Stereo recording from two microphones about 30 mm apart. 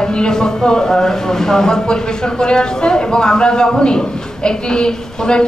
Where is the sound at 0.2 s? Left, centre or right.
Left.